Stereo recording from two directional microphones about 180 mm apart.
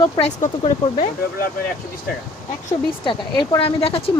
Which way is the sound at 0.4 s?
35° left (ahead or behind).